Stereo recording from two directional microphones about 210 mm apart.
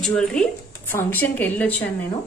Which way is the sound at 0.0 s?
5° left (ahead or behind).